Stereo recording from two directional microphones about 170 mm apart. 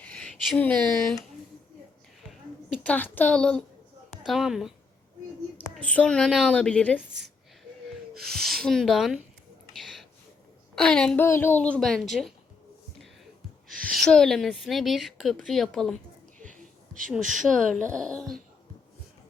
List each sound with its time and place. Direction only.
0.0 s speech: 5° left (ahead or behind)
2.8 s a woman's voice: 10° left (ahead or behind)
5.7 s a woman's voice: 10° left (ahead or behind)
8.3 s speech: 5° left (ahead or behind)
9.7 s a sound: centre (ahead or behind)
10.8 s speech: 5° left (ahead or behind)
13.7 s a woman's voice: centre (ahead or behind)
16.5 s a sound: 50° right (ahead or behind)
17.1 s speech: centre (ahead or behind)